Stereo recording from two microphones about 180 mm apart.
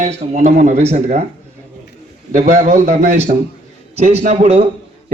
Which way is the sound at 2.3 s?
45° right (ahead or behind).